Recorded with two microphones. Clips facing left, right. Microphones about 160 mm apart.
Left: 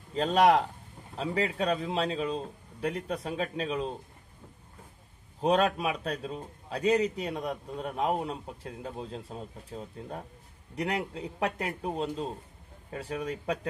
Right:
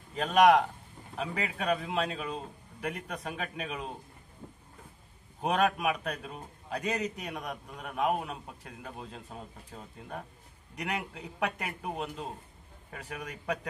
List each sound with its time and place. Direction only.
0.1 s a man's voice: 30° left (ahead or behind)
5.4 s a man's voice: 30° left (ahead or behind)
12.9 s a man's voice: 35° left (ahead or behind)